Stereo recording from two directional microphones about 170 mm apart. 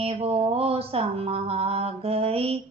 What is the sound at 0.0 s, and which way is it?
Mantra, 35° right (ahead or behind).